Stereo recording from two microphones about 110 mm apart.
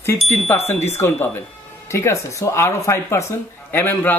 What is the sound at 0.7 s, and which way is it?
Speech, 20° left (ahead or behind).